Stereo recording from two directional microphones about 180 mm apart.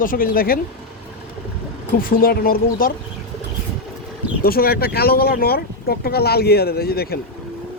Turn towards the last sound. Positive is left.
turn(degrees=60)  # may be behind; listen again after turning